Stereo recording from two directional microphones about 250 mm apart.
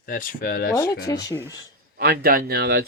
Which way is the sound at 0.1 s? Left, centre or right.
Left.